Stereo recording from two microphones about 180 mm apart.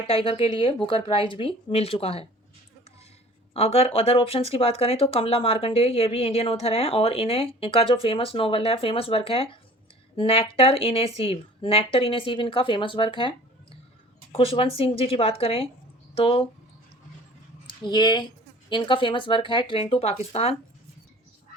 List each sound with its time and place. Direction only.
0.1 s speech: 30° left (ahead or behind)
3.5 s speech: 35° left (ahead or behind)
17.8 s speech: 25° left (ahead or behind)